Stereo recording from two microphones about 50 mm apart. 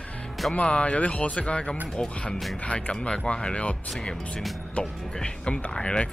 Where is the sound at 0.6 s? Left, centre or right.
Left.